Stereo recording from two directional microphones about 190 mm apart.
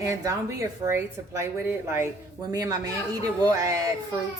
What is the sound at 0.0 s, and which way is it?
Speech, 15° right (ahead or behind).